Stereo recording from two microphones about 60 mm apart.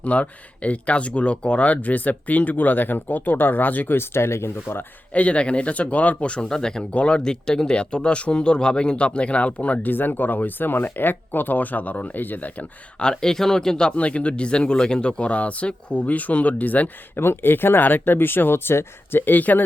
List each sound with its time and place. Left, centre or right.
0.0 s speech: left
3.9 s speech: left
5.1 s speech: left
13.0 s speech: centre
17.2 s speech: left